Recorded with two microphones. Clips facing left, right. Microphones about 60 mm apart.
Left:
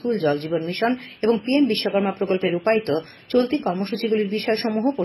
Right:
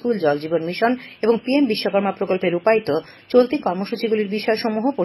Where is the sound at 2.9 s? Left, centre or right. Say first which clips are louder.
Right 3 dB; right.